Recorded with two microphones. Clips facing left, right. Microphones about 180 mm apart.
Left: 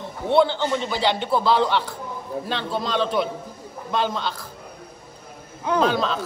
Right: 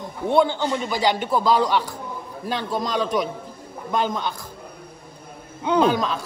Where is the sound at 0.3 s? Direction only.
15° right (ahead or behind).